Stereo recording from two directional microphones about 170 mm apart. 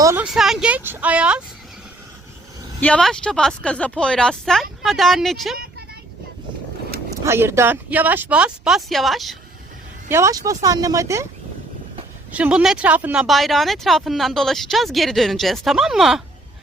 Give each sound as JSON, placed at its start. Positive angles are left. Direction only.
{"t": 0.0, "sound": "a sound", "side_deg": -15}
{"t": 0.3, "sound": "speech", "side_deg": 0}
{"t": 2.8, "sound": "speech", "side_deg": 5}
{"t": 7.3, "sound": "speech", "side_deg": -15}
{"t": 10.1, "sound": "speech", "side_deg": -15}
{"t": 12.3, "sound": "speech", "side_deg": -5}